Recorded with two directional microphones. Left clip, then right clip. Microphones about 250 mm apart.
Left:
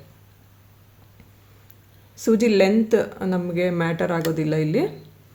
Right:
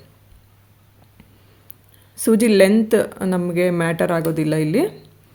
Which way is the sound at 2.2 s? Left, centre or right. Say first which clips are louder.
Right 4 dB; right.